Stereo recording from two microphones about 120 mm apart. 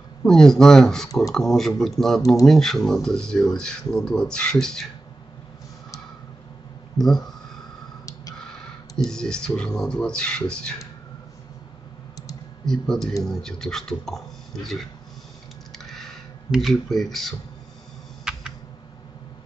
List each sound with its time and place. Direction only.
0.2 s speech: 5° left (ahead or behind)
7.0 s speech: 5° left (ahead or behind)
8.0 s snort: 30° left (ahead or behind)
8.5 s speech: 5° left (ahead or behind)
12.6 s speech: 5° left (ahead or behind)
15.8 s a sound: centre (ahead or behind)
16.5 s speech: centre (ahead or behind)
18.3 s a sound: 5° right (ahead or behind)